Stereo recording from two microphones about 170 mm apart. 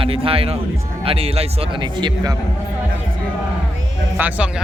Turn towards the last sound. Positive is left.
turn(degrees=-10)  # may be behind; listen again after turning